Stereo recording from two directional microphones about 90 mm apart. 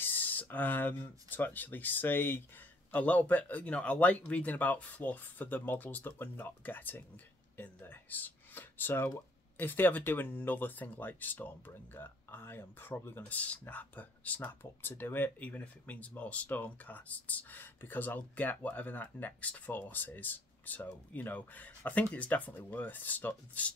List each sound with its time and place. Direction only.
0.0 s speech: 20° left (ahead or behind)